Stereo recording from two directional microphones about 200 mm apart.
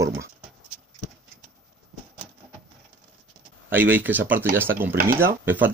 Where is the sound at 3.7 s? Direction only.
10° right (ahead or behind).